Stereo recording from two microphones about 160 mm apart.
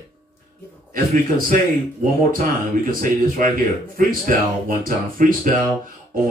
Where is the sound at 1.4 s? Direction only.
60° right (ahead or behind).